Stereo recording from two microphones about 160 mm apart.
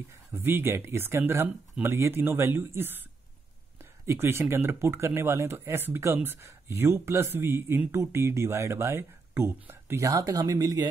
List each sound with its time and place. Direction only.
0.3 s speech: 15° right (ahead or behind)
4.0 s speech: 15° right (ahead or behind)